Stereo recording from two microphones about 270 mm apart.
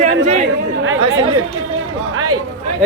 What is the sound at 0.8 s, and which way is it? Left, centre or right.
Speech, right.